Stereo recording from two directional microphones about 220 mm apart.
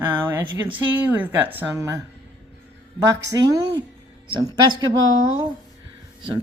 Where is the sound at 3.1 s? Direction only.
15° right (ahead or behind).